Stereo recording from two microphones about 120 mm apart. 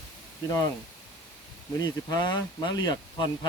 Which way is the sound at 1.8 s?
40° left (ahead or behind).